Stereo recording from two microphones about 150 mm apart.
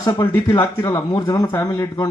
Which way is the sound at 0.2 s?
15° left (ahead or behind).